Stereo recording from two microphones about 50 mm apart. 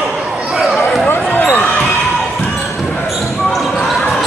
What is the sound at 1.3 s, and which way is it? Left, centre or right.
Basketball bounce, left.